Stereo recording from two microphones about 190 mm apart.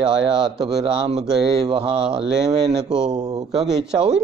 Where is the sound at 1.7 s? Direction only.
25° right (ahead or behind).